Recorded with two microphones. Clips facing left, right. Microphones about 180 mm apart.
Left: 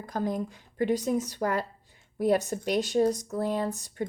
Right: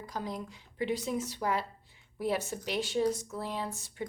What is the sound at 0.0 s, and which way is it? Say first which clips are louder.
A woman's voice: left 8 dB; 50° left (ahead or behind).